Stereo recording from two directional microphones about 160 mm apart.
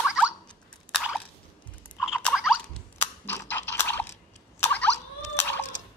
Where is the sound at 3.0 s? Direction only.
10° left (ahead or behind).